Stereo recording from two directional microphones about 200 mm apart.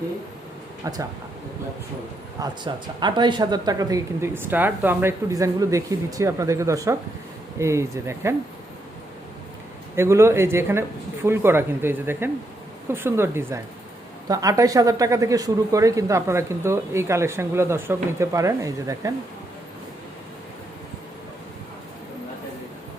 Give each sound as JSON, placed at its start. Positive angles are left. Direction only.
{"t": 0.9, "sound": "speech", "side_deg": -15}
{"t": 2.4, "sound": "speech", "side_deg": -20}
{"t": 9.9, "sound": "speech", "side_deg": -15}